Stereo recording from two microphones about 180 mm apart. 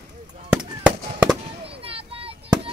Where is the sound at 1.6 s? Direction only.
30° right (ahead or behind).